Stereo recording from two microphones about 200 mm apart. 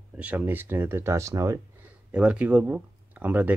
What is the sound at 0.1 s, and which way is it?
Speech, 5° right (ahead or behind).